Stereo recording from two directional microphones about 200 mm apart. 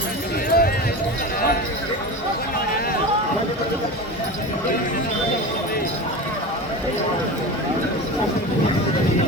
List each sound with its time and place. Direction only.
0.5 s run: 50° left (ahead or behind)